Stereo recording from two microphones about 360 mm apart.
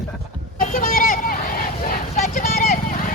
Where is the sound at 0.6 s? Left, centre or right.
Left.